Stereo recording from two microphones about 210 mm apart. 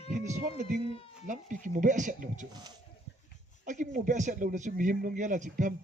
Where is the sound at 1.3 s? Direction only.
40° right (ahead or behind).